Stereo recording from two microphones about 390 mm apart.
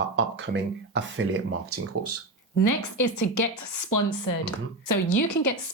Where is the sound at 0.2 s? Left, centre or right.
Right.